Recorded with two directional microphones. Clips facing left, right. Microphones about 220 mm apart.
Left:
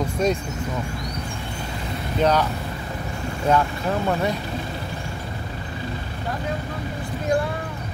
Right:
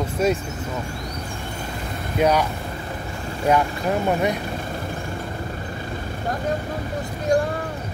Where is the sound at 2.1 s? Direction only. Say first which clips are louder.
Right 1 dB; 10° right (ahead or behind).